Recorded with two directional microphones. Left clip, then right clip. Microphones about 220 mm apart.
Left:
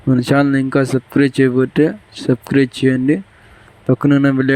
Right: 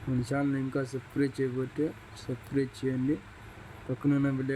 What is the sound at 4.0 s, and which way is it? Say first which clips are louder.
Speech: left 14 dB; 45° left (ahead or behind).